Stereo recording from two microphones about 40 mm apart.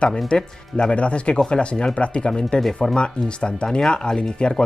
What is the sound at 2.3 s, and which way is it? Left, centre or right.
Speech, centre.